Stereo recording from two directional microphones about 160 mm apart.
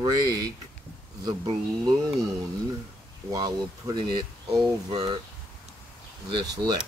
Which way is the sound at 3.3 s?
25° right (ahead or behind).